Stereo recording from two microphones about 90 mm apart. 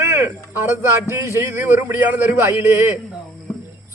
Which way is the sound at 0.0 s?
30° right (ahead or behind).